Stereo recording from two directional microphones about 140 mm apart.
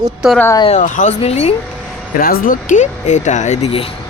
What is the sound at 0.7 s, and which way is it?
Speech, 65° left (ahead or behind).